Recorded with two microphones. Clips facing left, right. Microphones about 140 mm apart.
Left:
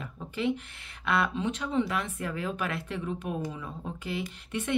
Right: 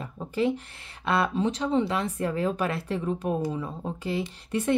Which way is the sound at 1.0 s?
30° right (ahead or behind).